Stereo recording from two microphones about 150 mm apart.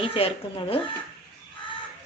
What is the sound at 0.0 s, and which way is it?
Speech, 40° left (ahead or behind).